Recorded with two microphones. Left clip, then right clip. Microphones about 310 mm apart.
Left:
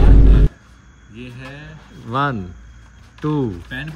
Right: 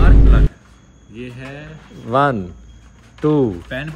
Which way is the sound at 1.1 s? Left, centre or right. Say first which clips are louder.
Right 3 dB; centre.